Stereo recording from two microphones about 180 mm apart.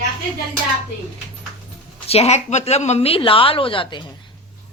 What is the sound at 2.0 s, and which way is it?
A woman's voice, 35° left (ahead or behind).